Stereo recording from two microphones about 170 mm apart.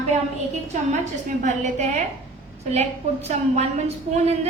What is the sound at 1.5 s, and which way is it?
A woman's voice, 45° right (ahead or behind).